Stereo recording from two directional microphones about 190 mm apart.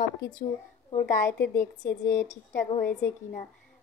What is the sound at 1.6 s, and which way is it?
Speech, 15° left (ahead or behind).